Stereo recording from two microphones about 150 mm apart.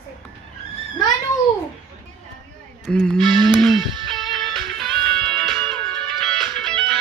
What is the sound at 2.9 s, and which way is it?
Music, 5° left (ahead or behind).